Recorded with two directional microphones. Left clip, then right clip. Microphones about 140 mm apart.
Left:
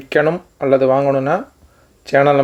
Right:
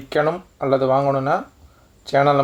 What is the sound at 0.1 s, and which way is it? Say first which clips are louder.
Speech: left 4 dB; 30° left (ahead or behind).